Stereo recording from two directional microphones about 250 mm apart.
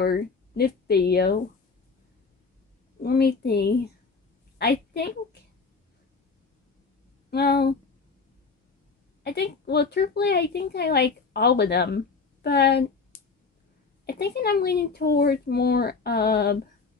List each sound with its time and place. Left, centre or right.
0.0 s speech: left
3.0 s a woman's voice: left
7.2 s speech: left
9.2 s a woman's voice: left
14.0 s a woman's voice: left